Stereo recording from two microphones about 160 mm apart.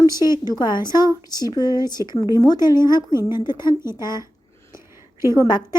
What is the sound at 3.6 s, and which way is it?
Speech, 15° right (ahead or behind).